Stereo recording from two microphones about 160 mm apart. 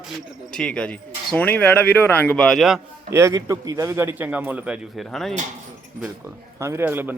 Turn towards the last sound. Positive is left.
turn(degrees=-15)  # may be behind; listen again after turning